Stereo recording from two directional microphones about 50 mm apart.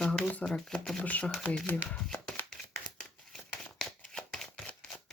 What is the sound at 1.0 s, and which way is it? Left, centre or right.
Speech, left.